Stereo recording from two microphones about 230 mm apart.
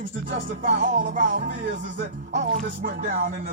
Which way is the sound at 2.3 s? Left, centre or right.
Right.